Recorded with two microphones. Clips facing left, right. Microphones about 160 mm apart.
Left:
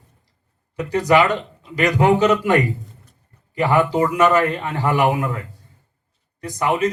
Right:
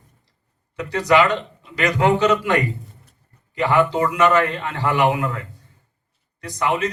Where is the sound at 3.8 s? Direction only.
10° left (ahead or behind).